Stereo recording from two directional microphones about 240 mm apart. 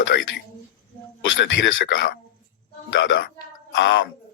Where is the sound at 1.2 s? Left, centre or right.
Left.